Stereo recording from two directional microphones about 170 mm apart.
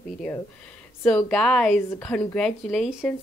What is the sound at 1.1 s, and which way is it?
Speech, 5° left (ahead or behind).